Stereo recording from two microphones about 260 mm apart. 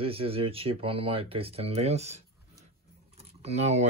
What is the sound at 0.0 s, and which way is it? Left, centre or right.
Speech, right.